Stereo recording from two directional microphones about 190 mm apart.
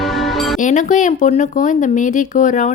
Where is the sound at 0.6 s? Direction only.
40° left (ahead or behind).